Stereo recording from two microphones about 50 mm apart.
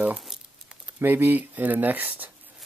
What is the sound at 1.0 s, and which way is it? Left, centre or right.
Speech, right.